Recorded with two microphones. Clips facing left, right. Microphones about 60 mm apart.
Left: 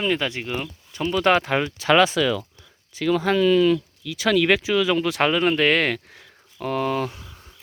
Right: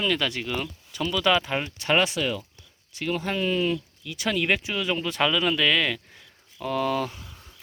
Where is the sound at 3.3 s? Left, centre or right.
Left.